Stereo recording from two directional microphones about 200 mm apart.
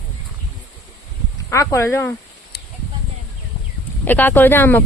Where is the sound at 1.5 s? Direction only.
15° left (ahead or behind).